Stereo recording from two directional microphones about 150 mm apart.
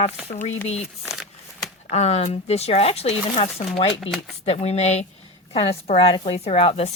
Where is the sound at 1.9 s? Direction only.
45° left (ahead or behind).